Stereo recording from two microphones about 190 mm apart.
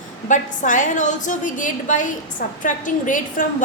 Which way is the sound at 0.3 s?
40° left (ahead or behind).